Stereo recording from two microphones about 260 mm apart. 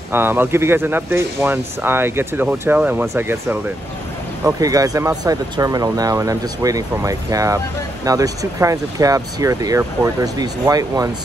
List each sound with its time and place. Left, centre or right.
0.1 s speech: centre